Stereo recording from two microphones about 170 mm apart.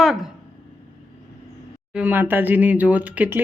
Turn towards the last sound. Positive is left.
turn(degrees=-10)  # may be behind; listen again after turning